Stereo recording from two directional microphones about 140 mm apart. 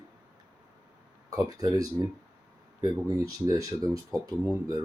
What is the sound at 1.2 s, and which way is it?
Speech, 25° right (ahead or behind).